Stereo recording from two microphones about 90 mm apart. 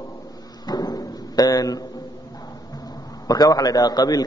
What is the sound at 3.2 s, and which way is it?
A man's voice, 45° left (ahead or behind).